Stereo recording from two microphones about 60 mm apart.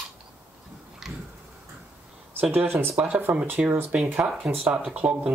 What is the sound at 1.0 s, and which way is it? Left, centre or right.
Tick-tock, centre.